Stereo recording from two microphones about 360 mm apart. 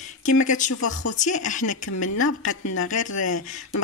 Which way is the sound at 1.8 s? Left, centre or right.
Left.